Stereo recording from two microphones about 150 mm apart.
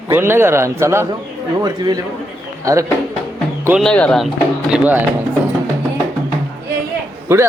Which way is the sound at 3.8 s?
5° left (ahead or behind).